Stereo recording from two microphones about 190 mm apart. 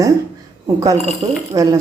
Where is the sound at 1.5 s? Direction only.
15° right (ahead or behind).